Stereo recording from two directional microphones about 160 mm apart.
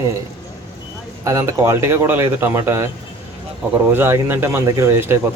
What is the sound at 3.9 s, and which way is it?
A man's voice, 15° right (ahead or behind).